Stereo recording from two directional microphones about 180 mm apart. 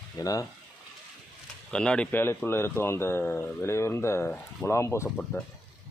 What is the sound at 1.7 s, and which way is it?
Speech, 5° left (ahead or behind).